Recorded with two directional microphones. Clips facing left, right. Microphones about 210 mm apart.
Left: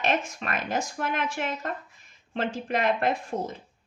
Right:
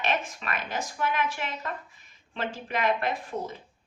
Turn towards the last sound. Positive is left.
turn(degrees=45)  # may be behind; listen again after turning